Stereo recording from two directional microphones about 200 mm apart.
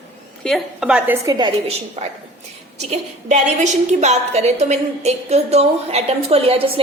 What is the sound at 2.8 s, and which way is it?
A woman's voice, 35° right (ahead or behind).